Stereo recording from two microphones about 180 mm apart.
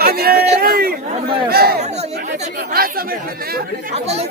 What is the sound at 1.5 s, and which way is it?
Speech, 60° right (ahead or behind).